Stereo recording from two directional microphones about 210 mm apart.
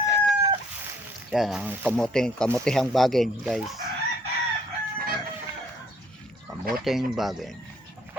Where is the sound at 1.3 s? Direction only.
Centre (ahead or behind).